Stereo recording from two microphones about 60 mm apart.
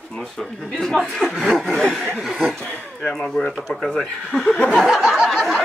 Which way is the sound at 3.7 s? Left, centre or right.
Centre.